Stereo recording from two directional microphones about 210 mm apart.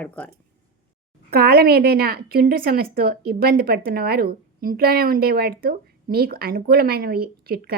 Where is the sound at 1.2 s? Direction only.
45° right (ahead or behind).